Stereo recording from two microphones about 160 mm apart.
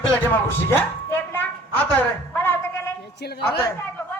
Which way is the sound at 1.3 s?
10° left (ahead or behind).